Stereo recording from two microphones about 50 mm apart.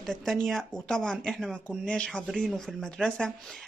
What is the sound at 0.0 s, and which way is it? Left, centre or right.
A woman's voice, centre.